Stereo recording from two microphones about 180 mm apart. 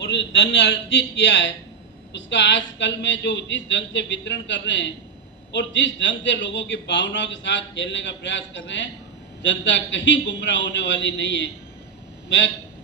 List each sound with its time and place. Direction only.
0.0 s a man's voice: 80° left